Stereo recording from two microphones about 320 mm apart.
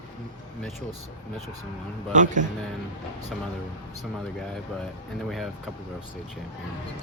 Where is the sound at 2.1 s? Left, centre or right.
Right.